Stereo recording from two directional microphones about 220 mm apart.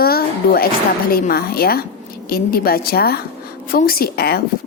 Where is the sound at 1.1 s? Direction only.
45° left (ahead or behind).